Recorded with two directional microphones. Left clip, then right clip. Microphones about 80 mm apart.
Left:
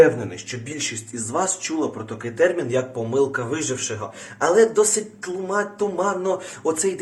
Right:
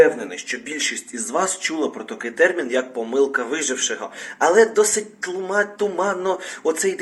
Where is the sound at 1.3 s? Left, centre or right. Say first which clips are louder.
Right 2 dB; left.